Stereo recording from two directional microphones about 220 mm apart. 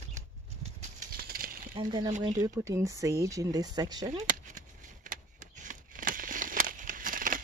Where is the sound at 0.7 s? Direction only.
40° right (ahead or behind).